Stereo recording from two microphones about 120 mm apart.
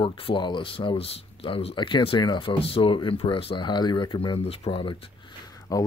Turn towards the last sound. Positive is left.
turn(degrees=30)  # may be behind; listen again after turning